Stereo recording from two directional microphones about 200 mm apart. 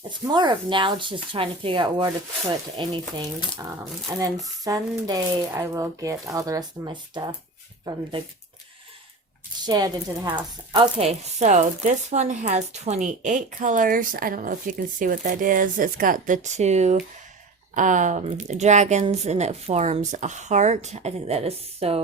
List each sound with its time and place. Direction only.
0.1 s speech: 20° right (ahead or behind)
4.6 s speech: 20° right (ahead or behind)
9.6 s speech: 20° right (ahead or behind)